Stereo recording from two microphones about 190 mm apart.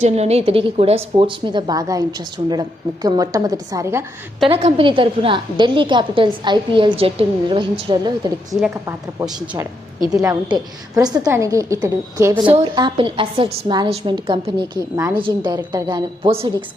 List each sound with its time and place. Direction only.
0.0 s a woman's voice: 35° right (ahead or behind); by 4.0 s 15° right (ahead or behind)
4.4 s a woman's voice: 30° right (ahead or behind)
10.1 s a woman's voice: 20° right (ahead or behind)
14.9 s a woman's voice: 20° right (ahead or behind)